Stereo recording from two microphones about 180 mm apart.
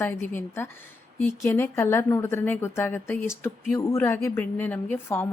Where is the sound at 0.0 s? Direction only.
15° left (ahead or behind).